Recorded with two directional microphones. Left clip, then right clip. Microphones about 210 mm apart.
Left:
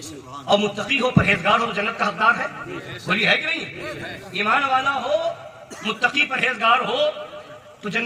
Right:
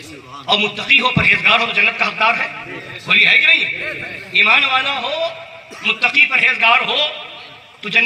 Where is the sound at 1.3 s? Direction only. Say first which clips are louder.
Right 7 dB; 65° left (ahead or behind).